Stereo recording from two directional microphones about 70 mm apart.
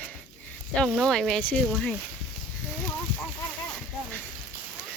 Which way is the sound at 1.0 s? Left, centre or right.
Centre.